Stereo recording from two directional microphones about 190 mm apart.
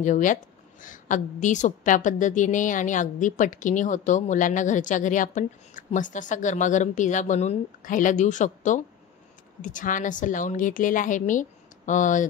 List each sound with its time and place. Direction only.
0.0 s a woman's voice: 40° left (ahead or behind)